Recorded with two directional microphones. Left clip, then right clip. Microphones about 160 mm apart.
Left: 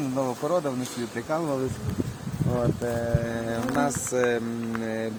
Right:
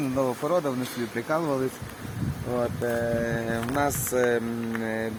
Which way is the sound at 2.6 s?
15° left (ahead or behind).